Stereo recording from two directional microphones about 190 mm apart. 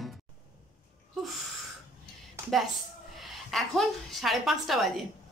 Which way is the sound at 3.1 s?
Centre (ahead or behind).